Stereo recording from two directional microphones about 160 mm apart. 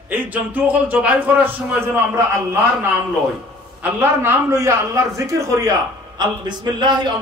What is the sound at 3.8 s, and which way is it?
A man's voice, 15° right (ahead or behind).